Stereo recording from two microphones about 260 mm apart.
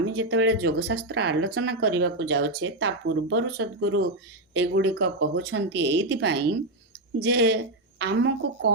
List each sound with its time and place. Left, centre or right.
0.0 s a woman's voice: right